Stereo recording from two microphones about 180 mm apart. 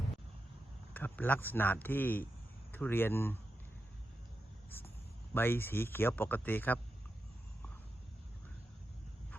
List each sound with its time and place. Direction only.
0.9 s speech: 10° left (ahead or behind)
5.3 s speech: 10° left (ahead or behind)